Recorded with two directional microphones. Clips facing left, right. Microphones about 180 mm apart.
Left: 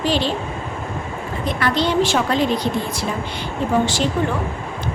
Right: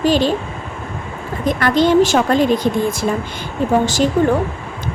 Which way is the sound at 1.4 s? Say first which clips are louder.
Right 6 dB; 45° right (ahead or behind).